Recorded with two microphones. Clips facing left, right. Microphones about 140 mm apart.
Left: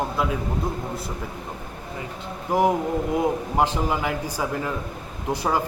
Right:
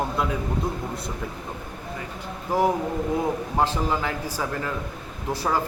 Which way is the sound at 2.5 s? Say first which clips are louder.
Left 2 dB; 15° left (ahead or behind).